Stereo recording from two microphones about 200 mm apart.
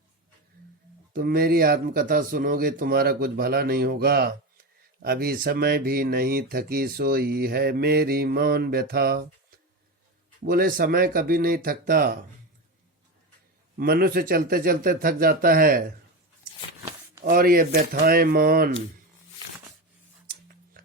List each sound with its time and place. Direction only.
1.1 s speech: 45° right (ahead or behind)
10.4 s speech: 45° right (ahead or behind)
13.7 s speech: 50° right (ahead or behind)
17.2 s speech: 45° right (ahead or behind)